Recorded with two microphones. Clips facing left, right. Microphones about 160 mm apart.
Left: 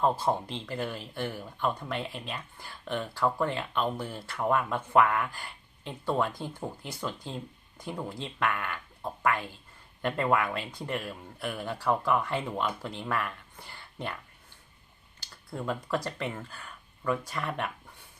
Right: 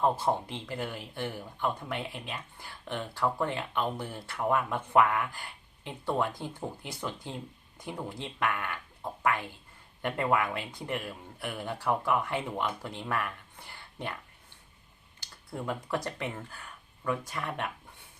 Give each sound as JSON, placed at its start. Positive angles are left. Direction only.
{"t": 0.0, "sound": "speech", "side_deg": -20}
{"t": 15.2, "sound": "a sound", "side_deg": -15}
{"t": 16.0, "sound": "speech", "side_deg": -15}